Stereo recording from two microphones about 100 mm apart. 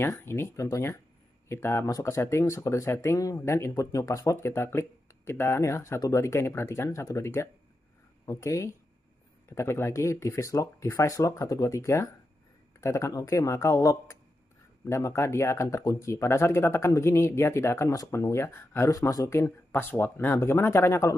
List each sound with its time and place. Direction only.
0.2 s speech: 25° left (ahead or behind)